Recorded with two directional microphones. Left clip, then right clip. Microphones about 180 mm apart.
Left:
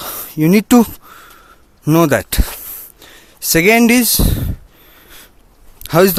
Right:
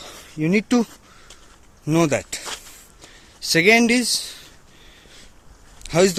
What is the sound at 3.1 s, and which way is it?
Speech, 50° left (ahead or behind).